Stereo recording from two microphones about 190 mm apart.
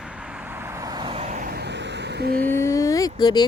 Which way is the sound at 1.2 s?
40° right (ahead or behind).